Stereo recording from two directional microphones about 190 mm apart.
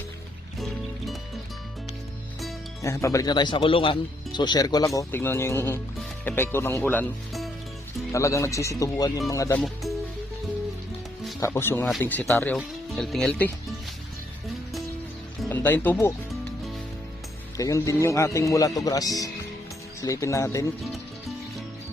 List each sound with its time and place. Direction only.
0.6 s music: centre (ahead or behind)
2.8 s speech: 15° left (ahead or behind)
8.1 s speech: 15° left (ahead or behind)
9.6 s speech: centre (ahead or behind)
11.3 s speech: 15° left (ahead or behind)
15.4 s speech: 10° left (ahead or behind)
17.6 s speech: 15° left (ahead or behind)